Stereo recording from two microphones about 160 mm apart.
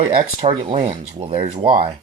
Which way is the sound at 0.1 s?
55° right (ahead or behind).